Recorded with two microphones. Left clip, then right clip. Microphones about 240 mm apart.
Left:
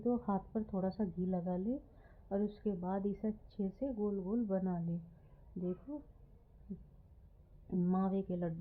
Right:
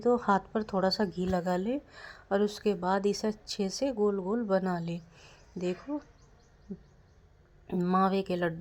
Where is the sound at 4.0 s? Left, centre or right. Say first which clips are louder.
Right 9 dB; right.